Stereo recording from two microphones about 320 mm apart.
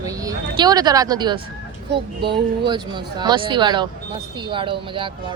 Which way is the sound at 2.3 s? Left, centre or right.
Centre.